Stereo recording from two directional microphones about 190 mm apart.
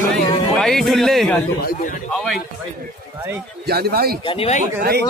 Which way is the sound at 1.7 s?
45° left (ahead or behind).